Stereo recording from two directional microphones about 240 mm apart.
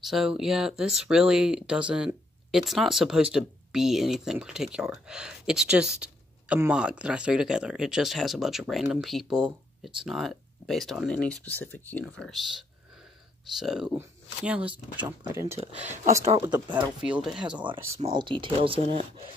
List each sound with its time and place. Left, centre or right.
0.0 s speech: centre
17.9 s speech: right